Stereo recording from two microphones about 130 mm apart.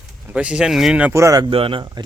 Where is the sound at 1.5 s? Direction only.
45° right (ahead or behind).